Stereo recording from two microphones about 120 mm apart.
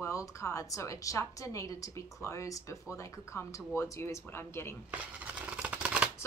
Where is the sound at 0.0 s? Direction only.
25° left (ahead or behind).